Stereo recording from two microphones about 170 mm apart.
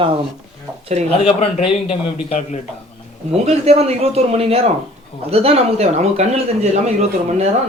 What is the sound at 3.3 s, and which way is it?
A man's voice, 40° right (ahead or behind).